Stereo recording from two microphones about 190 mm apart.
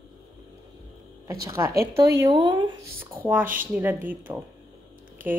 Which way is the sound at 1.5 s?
15° right (ahead or behind).